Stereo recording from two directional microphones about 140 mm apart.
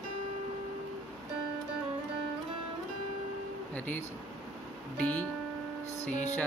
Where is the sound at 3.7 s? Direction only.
10° left (ahead or behind).